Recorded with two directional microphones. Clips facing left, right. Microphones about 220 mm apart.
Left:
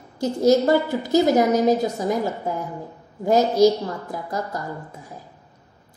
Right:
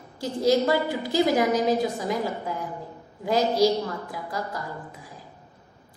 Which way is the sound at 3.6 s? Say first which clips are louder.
Left 5 dB; 45° left (ahead or behind).